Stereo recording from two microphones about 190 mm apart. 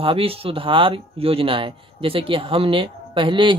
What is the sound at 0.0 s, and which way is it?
Speech, 30° right (ahead or behind).